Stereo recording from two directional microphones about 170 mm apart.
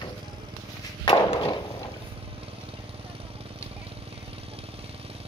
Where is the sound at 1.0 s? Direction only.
25° left (ahead or behind).